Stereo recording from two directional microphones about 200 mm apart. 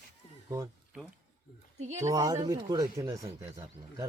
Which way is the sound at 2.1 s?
15° right (ahead or behind).